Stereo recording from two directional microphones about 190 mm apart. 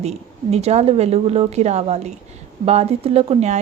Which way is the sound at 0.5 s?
35° right (ahead or behind).